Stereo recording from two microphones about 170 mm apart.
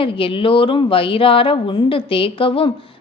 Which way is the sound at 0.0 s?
30° left (ahead or behind).